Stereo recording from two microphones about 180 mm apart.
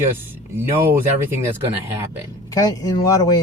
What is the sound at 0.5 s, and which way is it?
Speech, 15° right (ahead or behind).